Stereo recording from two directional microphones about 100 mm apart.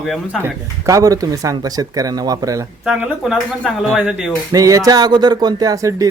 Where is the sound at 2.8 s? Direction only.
5° right (ahead or behind).